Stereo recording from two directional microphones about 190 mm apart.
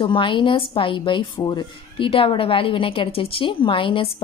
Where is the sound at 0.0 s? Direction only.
25° left (ahead or behind).